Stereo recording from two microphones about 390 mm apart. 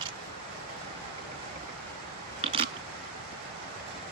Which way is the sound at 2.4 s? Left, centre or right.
Centre.